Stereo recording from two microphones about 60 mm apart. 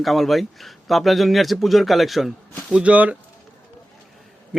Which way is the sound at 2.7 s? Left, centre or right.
Right.